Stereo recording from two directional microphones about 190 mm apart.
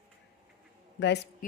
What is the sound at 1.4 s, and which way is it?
Speech, 45° left (ahead or behind).